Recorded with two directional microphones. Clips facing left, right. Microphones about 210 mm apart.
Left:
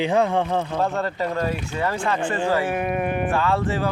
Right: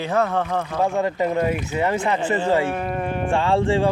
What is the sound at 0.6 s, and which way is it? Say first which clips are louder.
Speech: right 2 dB; 10° right (ahead or behind).